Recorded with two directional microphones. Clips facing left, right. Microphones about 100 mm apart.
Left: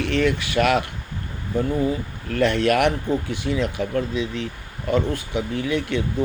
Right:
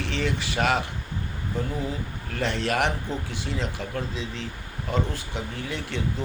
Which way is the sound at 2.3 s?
60° left (ahead or behind).